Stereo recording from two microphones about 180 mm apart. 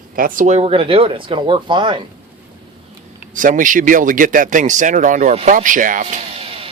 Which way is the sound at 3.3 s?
45° right (ahead or behind).